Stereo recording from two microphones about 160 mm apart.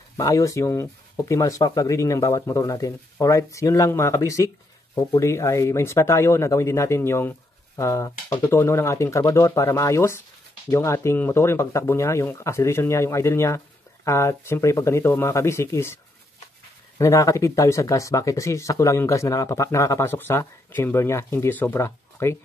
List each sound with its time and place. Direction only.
0.2 s speech: 20° left (ahead or behind)
17.0 s speech: 20° left (ahead or behind)